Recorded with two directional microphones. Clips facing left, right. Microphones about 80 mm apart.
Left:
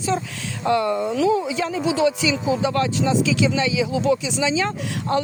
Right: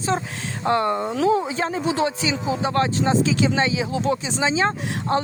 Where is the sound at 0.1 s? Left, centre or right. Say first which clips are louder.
Even; right.